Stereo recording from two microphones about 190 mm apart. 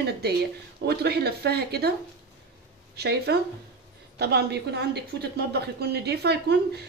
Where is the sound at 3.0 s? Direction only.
60° right (ahead or behind).